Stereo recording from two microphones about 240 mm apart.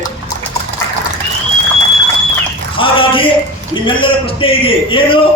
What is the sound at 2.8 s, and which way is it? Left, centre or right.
A man's voice, left.